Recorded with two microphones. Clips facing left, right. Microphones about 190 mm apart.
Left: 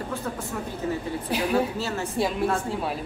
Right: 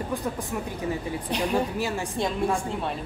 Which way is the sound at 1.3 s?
5° left (ahead or behind).